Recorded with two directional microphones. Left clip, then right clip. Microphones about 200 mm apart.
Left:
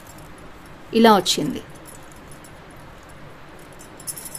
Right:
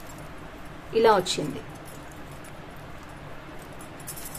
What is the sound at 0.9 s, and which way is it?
Speech, 45° left (ahead or behind).